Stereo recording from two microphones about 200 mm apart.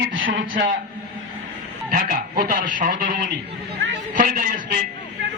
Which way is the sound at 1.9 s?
45° right (ahead or behind).